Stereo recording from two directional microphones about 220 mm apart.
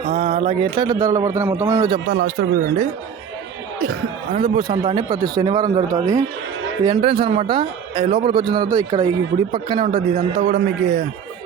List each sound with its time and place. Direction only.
0.1 s a man's voice: 25° right (ahead or behind)
2.2 s speech: 40° right (ahead or behind)
4.4 s a man's voice: 25° right (ahead or behind)